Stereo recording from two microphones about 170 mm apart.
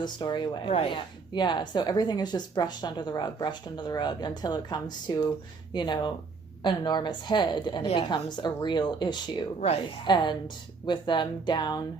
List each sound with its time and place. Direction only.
0.0 s speech: 25° left (ahead or behind)